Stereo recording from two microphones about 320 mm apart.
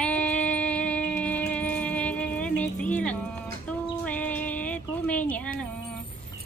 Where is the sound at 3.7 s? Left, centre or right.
Centre.